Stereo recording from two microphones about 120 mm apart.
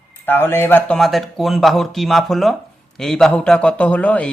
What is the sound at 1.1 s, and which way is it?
A man's voice, centre (ahead or behind).